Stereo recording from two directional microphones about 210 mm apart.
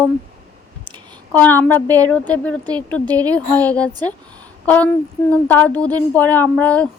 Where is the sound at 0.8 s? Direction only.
20° right (ahead or behind).